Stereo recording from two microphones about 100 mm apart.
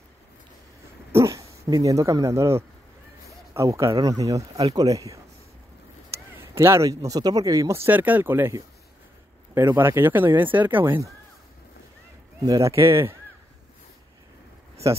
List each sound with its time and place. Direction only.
1.1 s speech: 30° right (ahead or behind)
6.3 s speech: 25° right (ahead or behind)
9.8 s speech: 25° right (ahead or behind)
12.4 s speech: 35° right (ahead or behind)